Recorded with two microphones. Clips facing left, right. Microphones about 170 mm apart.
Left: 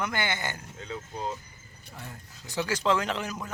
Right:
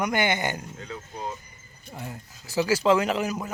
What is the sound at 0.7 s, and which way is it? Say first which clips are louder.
Speech: even; 20° left (ahead or behind).